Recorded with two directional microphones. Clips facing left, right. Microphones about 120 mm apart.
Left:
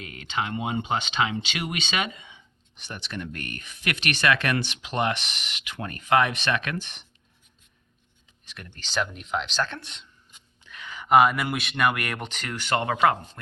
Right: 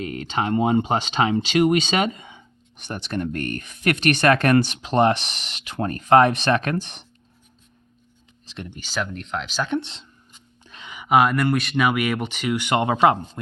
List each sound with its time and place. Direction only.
0.0 s speech: 40° right (ahead or behind)
8.4 s speech: 25° right (ahead or behind)
8.7 s speech: 5° right (ahead or behind)
9.6 s speech: 20° right (ahead or behind)
10.6 s a sound: 30° right (ahead or behind)
10.8 s a sound: 15° right (ahead or behind)
11.1 s speech: centre (ahead or behind); by 13.4 s 20° right (ahead or behind)